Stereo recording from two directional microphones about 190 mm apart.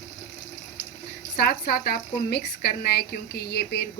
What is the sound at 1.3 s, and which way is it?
Speech, 55° left (ahead or behind).